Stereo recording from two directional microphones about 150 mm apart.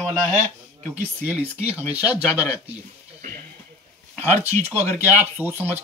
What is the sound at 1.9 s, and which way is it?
Speech, 10° right (ahead or behind).